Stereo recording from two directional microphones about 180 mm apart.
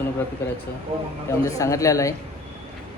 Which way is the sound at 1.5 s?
15° left (ahead or behind).